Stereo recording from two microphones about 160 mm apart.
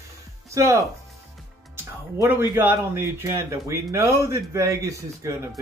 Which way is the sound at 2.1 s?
15° right (ahead or behind).